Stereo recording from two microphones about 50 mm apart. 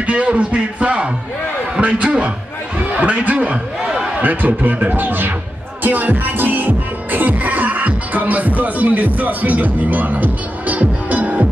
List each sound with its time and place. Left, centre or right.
0.0 s speech: right
1.8 s a sound: right
4.2 s speech: right
5.9 s music: right